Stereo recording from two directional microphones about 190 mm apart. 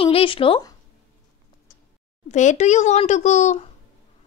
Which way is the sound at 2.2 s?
40° left (ahead or behind).